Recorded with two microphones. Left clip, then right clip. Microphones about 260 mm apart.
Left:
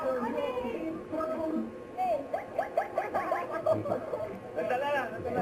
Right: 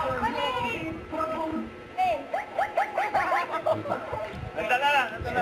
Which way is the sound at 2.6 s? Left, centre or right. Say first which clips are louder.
Right 5 dB; centre.